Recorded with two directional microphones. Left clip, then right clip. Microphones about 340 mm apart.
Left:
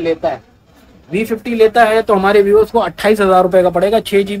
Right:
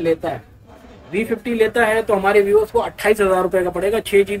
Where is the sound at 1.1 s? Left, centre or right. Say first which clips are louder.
Left 3 dB; left.